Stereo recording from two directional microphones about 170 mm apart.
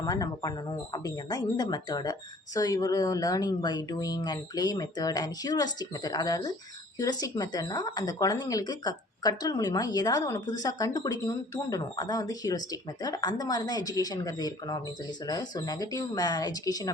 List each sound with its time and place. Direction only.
0.0 s speech: 20° left (ahead or behind)